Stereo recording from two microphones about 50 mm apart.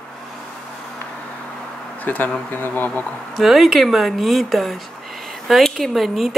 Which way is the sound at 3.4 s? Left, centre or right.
Centre.